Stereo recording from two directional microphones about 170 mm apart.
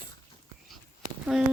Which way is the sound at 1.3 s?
Centre (ahead or behind).